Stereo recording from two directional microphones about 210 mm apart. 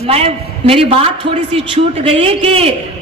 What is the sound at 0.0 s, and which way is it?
A man's voice, 30° right (ahead or behind).